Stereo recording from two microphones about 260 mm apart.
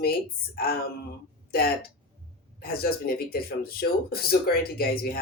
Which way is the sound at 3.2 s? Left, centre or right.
Left.